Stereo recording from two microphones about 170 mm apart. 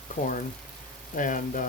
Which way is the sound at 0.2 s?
50° left (ahead or behind).